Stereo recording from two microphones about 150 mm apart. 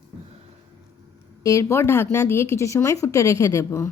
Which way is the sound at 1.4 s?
20° left (ahead or behind).